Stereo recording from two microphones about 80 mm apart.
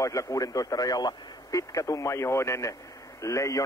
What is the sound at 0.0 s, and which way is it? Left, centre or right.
A man's voice, left.